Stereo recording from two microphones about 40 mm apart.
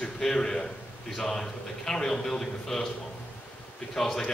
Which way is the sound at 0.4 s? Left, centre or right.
Centre.